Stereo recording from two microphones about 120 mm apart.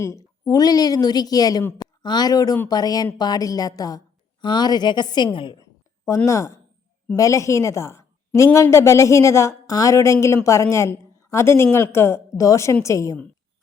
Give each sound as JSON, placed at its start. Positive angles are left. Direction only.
{"t": 0.0, "sound": "a woman's voice", "side_deg": 25}
{"t": 6.1, "sound": "a woman's voice", "side_deg": 25}